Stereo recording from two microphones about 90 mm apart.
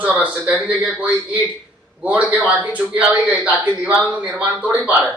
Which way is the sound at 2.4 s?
15° right (ahead or behind).